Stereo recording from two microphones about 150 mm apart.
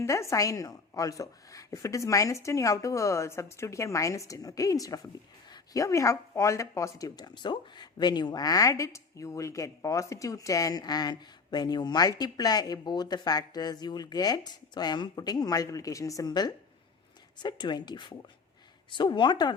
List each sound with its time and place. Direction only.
0.0 s a woman's voice: 20° left (ahead or behind)